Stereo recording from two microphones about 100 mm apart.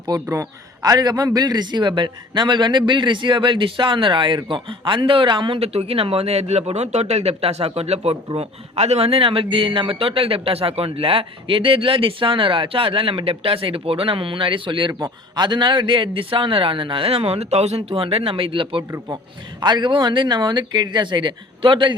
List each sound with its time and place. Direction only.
0.1 s a man's voice: 35° right (ahead or behind); by 5.5 s 55° right (ahead or behind)
5.5 s a man's voice: 85° right; by 18.9 s 60° right (ahead or behind)
18.9 s speech: 30° right (ahead or behind)
19.5 s a man's voice: 50° right (ahead or behind)